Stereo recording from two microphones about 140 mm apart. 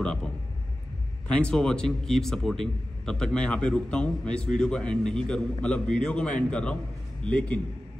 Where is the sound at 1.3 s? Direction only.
5° left (ahead or behind).